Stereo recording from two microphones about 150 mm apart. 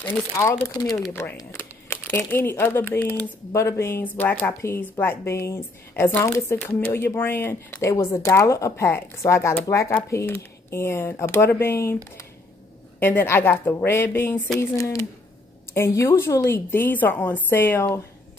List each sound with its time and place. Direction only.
0.3 s speech: 15° left (ahead or behind)
13.0 s speech: 15° left (ahead or behind)